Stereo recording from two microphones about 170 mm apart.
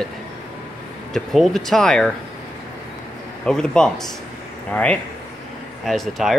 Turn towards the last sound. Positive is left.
turn(degrees=0)  # may be behind; listen again after turning